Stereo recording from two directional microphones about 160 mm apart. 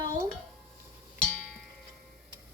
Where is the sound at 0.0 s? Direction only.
20° right (ahead or behind).